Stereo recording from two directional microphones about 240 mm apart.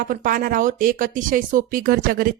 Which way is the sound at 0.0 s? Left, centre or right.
Right.